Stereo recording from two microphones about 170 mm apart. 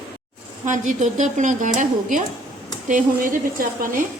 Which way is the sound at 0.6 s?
45° right (ahead or behind).